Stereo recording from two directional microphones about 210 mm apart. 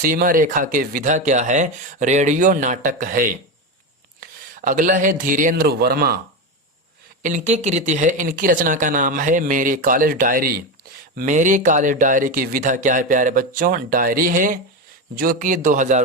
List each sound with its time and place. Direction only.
0.0 s a man's voice: 40° right (ahead or behind)
7.2 s speech: 35° right (ahead or behind)